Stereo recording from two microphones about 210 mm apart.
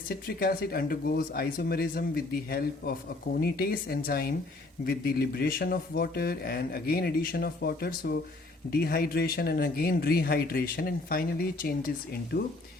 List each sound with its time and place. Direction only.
0.1 s speech: 45° left (ahead or behind)